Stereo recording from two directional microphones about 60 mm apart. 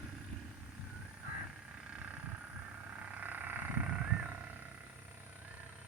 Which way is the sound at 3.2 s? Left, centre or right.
Right.